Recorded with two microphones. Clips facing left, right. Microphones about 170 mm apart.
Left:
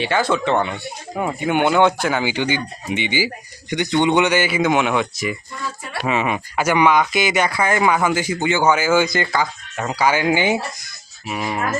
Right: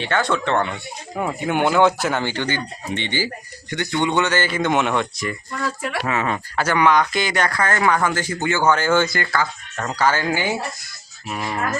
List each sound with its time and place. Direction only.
0.0 s speech: 5° left (ahead or behind)
2.3 s speech: 10° left (ahead or behind)
5.5 s a sound: 90° right
6.1 s speech: 15° left (ahead or behind)
9.0 s speech: 20° left (ahead or behind)
11.3 s speech: 5° left (ahead or behind)